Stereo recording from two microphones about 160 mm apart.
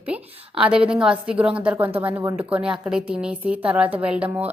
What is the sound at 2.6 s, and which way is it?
A woman's voice, 5° right (ahead or behind).